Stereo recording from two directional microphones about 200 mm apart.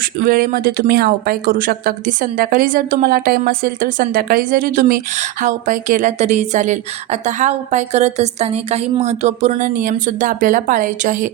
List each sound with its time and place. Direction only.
0.0 s speech: 45° right (ahead or behind)